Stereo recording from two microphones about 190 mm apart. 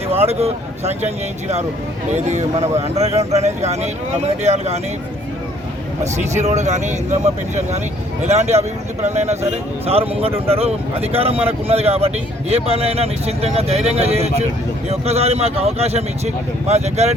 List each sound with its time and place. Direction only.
0.1 s speech: 30° right (ahead or behind)
6.0 s speech: 35° right (ahead or behind)